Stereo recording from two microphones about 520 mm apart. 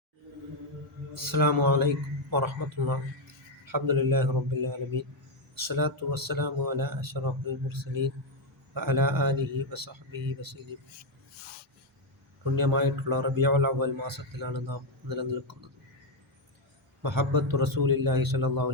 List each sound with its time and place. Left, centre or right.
1.1 s a man's voice: right
12.5 s a man's voice: right
17.0 s a man's voice: right